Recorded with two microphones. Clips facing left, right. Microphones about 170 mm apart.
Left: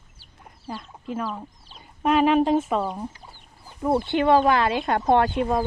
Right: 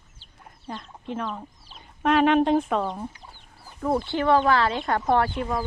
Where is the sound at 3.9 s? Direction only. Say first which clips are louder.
Left 3 dB; 20° left (ahead or behind).